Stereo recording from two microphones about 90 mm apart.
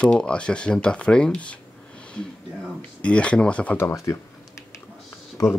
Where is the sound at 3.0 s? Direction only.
15° left (ahead or behind).